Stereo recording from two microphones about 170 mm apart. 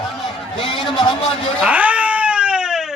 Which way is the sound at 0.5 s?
30° left (ahead or behind).